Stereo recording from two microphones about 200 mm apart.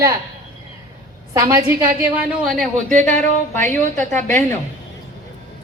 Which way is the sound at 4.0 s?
10° left (ahead or behind).